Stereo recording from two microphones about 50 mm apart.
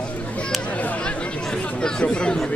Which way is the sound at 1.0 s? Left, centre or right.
Left.